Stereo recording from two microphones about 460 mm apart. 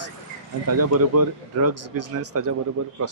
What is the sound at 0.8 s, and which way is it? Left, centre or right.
Speech, right.